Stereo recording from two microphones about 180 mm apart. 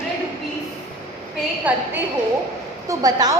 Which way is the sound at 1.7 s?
10° right (ahead or behind).